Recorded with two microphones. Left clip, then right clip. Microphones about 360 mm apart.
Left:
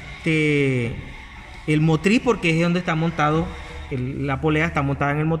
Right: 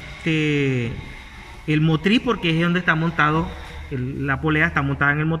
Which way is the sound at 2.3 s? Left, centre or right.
Centre.